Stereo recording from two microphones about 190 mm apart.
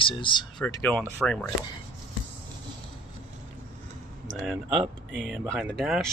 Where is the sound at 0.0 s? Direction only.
25° left (ahead or behind).